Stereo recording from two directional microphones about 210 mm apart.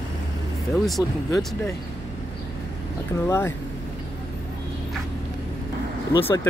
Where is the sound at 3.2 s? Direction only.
10° left (ahead or behind).